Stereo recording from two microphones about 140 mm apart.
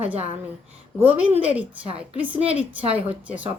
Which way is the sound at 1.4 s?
10° right (ahead or behind).